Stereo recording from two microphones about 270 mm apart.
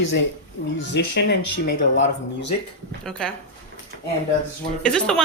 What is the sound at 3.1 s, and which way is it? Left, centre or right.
Speech, centre.